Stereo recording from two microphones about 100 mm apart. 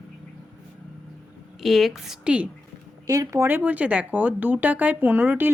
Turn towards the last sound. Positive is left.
turn(degrees=-20)  # may be behind; listen again after turning